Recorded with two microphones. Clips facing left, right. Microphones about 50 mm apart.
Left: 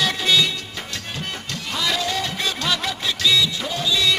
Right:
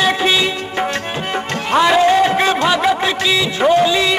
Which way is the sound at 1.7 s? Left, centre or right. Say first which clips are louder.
Right 13 dB; right.